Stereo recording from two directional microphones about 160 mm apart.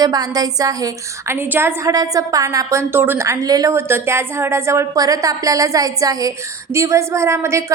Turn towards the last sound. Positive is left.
turn(degrees=-15)  # may be behind; listen again after turning